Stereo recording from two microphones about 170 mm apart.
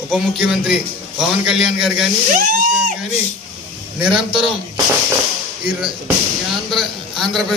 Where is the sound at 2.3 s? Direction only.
50° right (ahead or behind).